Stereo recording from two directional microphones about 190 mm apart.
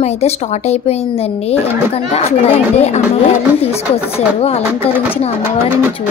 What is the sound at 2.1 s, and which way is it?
Speech, 35° left (ahead or behind).